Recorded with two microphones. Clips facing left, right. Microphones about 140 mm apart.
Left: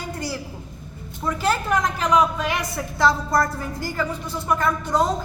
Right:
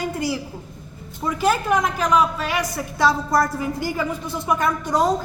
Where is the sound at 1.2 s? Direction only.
10° right (ahead or behind).